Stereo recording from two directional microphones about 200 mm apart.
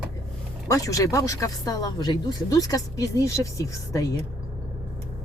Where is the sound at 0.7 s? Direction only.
15° left (ahead or behind).